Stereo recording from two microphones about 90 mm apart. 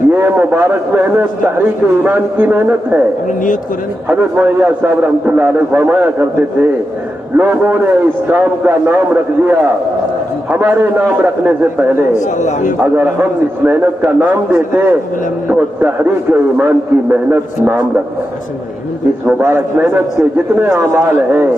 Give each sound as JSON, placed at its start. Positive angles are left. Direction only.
{"t": 0.1, "sound": "a man's voice", "side_deg": -25}
{"t": 4.1, "sound": "a man's voice", "side_deg": -20}
{"t": 19.4, "sound": "a man's voice", "side_deg": -25}
{"t": 20.7, "sound": "speech", "side_deg": -40}